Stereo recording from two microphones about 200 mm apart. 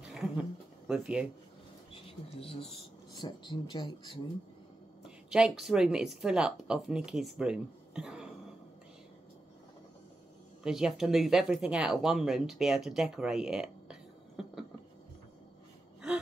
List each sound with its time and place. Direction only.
0.1 s a sound: centre (ahead or behind)
2.6 s speech: 25° left (ahead or behind)
5.0 s speech: 5° right (ahead or behind)
10.6 s speech: 5° right (ahead or behind)